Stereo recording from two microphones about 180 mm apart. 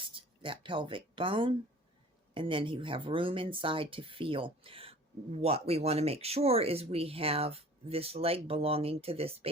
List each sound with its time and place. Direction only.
0.1 s speech: 30° right (ahead or behind)